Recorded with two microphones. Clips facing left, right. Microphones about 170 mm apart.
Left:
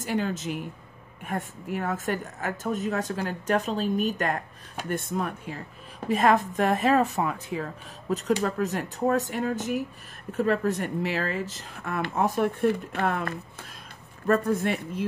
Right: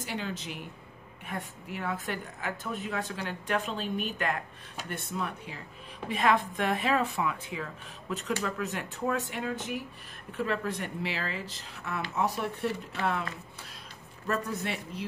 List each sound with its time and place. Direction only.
0.0 s speech: 45° left (ahead or behind)